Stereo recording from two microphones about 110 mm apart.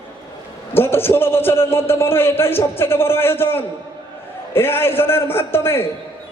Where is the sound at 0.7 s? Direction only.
20° left (ahead or behind).